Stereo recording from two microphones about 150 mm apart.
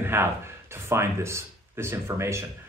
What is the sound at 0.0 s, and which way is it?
Speech, 15° right (ahead or behind).